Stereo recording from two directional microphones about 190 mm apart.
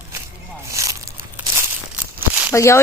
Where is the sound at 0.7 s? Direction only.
15° right (ahead or behind).